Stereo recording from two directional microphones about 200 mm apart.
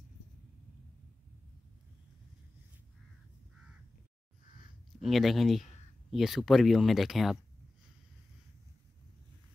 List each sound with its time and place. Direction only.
5.0 s speech: centre (ahead or behind)